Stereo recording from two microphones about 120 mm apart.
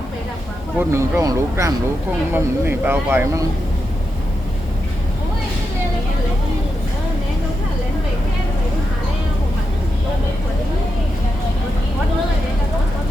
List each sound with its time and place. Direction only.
0.8 s speech: 25° right (ahead or behind)